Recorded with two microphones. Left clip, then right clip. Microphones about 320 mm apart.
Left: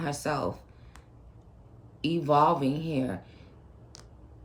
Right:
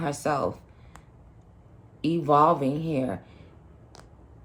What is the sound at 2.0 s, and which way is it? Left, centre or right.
Speech, centre.